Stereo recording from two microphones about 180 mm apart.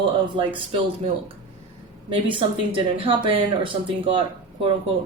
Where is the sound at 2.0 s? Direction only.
25° right (ahead or behind).